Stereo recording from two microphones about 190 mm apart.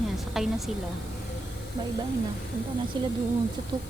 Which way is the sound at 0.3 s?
Centre (ahead or behind).